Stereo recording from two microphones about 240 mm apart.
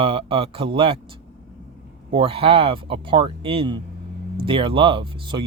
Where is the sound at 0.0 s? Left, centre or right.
Right.